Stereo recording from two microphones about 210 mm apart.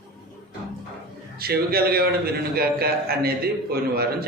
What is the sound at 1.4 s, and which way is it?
A man's voice, 45° right (ahead or behind).